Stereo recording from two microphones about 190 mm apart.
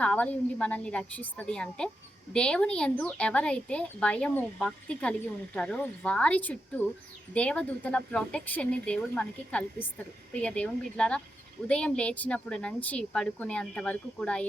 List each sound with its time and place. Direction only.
0.0 s a woman's voice: 5° left (ahead or behind)